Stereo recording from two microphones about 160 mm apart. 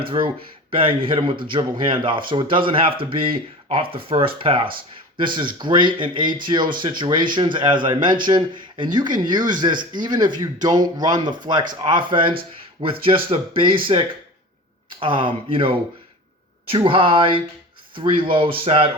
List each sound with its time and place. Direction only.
0.7 s speech: 35° right (ahead or behind)